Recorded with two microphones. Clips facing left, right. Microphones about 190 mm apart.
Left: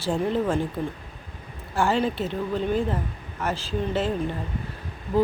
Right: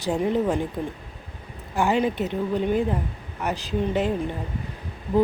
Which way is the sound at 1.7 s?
15° right (ahead or behind).